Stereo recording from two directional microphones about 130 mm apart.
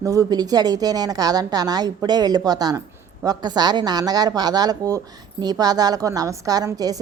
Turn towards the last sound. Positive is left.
turn(degrees=-30)  # may be behind; listen again after turning